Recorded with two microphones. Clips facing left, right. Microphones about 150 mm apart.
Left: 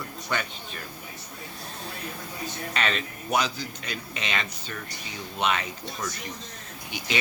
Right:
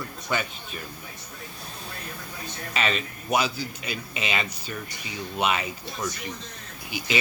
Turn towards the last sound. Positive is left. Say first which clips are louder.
# right 2 dB
turn(degrees=-5)  # may be behind; listen again after turning